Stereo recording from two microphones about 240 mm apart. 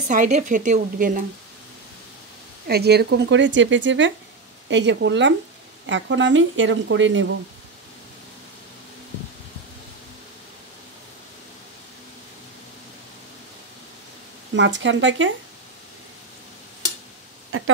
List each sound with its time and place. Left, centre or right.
0.1 s speech: right
2.7 s speech: right
14.5 s speech: right
17.5 s speech: right